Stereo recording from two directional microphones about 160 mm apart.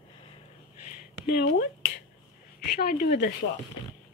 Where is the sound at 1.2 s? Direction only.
75° left (ahead or behind).